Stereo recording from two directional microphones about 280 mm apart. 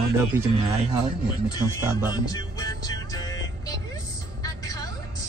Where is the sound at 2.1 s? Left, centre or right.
Centre.